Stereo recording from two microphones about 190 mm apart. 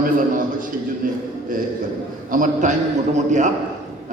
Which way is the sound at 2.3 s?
45° right (ahead or behind).